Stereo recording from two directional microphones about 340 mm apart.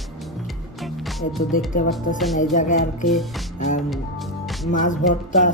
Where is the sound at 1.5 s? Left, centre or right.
Left.